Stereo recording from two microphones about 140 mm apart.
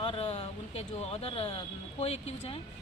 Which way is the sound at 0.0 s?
40° left (ahead or behind).